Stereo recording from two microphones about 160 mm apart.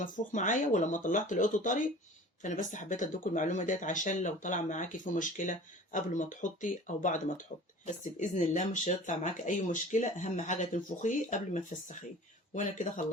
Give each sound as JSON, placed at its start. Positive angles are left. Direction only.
{"t": 0.0, "sound": "speech", "side_deg": 55}